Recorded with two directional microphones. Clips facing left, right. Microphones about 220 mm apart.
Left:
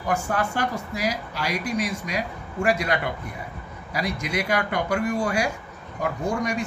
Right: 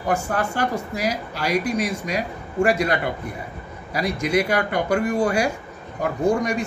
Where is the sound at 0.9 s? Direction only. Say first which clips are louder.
Right 2 dB; 45° right (ahead or behind).